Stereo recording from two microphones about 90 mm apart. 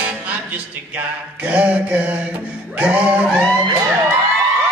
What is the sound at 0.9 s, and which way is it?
Mantra, 15° right (ahead or behind).